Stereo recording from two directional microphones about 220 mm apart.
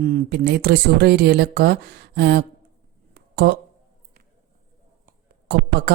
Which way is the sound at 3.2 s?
50° right (ahead or behind).